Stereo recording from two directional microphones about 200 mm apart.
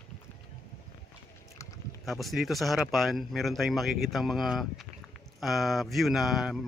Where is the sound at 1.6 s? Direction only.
15° left (ahead or behind).